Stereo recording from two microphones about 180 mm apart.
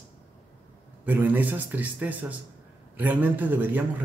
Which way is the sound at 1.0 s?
10° right (ahead or behind).